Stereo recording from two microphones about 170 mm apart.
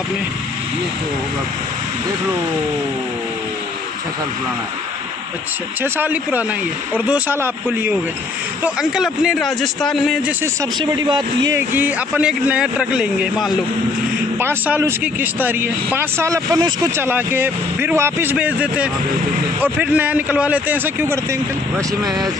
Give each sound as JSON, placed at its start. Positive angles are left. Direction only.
{"t": 5.8, "sound": "speech", "side_deg": -10}
{"t": 10.4, "sound": "speech", "side_deg": -20}
{"t": 11.7, "sound": "speech", "side_deg": -10}